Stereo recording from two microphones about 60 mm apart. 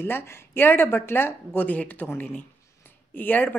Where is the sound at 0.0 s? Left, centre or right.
Left.